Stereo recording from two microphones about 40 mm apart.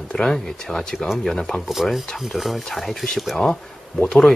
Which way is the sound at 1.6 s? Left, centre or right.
Centre.